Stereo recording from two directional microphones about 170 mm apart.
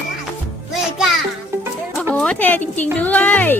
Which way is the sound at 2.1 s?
10° left (ahead or behind).